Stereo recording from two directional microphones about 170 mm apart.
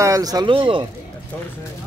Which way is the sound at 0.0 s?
20° right (ahead or behind).